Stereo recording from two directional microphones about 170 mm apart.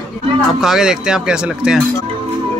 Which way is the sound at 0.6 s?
Centre (ahead or behind).